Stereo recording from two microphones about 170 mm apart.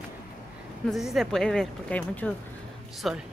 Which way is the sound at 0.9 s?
Centre (ahead or behind).